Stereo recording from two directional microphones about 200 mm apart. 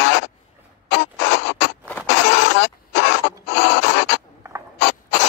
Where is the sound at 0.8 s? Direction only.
60° left (ahead or behind).